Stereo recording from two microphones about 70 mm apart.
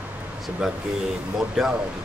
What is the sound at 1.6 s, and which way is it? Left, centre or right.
Speech, centre.